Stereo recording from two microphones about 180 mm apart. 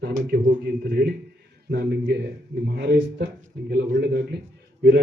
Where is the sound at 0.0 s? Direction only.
65° right (ahead or behind).